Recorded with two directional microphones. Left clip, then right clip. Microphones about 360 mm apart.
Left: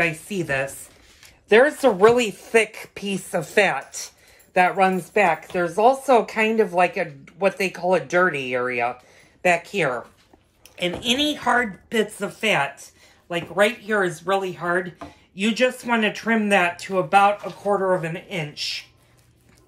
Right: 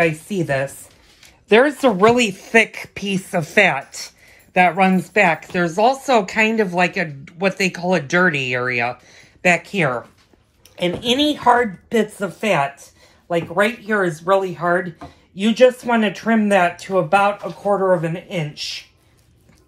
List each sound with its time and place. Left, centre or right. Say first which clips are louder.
0.0 s speech: right 4 dB; centre
3.6 s speech: right 4 dB; right
4.6 s speech: right 3 dB; centre